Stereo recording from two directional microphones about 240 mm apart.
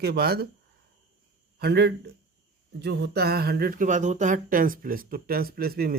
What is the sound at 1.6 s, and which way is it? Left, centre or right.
Speech, right.